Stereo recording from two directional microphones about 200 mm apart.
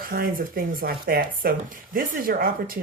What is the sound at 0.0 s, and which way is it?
Speech, 45° right (ahead or behind).